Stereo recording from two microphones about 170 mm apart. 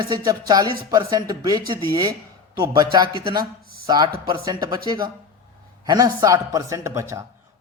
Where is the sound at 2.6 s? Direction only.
25° right (ahead or behind).